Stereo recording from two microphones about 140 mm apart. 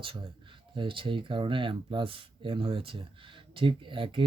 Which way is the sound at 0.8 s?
35° right (ahead or behind).